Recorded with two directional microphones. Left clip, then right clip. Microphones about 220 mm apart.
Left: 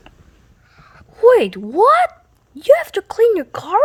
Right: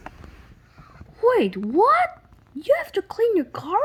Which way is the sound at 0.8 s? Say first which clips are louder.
Left 8 dB; 45° left (ahead or behind).